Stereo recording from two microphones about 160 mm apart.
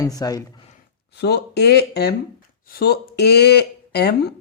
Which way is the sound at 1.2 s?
90° left.